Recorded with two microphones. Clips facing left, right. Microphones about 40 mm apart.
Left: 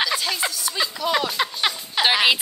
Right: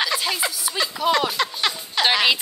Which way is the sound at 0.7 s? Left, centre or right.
Centre.